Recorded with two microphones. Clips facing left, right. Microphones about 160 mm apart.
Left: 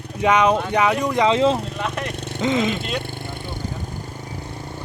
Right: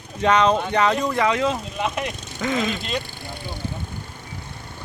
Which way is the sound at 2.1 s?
65° left (ahead or behind).